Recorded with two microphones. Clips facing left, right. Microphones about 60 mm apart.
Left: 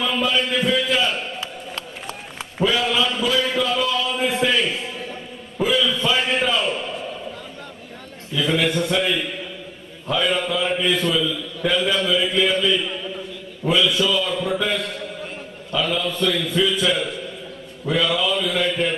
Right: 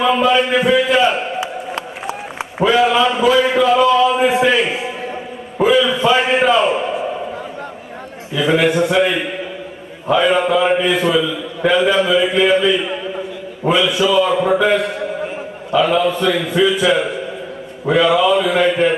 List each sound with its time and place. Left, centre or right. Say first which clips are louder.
0.3 s a man's voice: right 7 dB; right
2.6 s a man's voice: right 7 dB; right
8.6 s a man's voice: right 7 dB; centre
17.8 s a man's voice: right 8 dB; right